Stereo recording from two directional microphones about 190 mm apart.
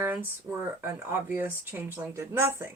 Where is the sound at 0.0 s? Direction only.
10° right (ahead or behind).